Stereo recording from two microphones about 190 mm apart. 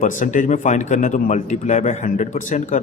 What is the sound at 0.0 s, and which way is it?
A man's voice, 45° left (ahead or behind).